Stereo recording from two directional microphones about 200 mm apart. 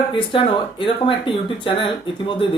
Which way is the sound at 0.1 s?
25° left (ahead or behind).